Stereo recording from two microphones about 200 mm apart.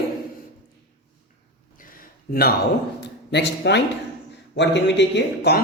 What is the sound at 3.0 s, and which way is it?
A man's voice, 60° left (ahead or behind).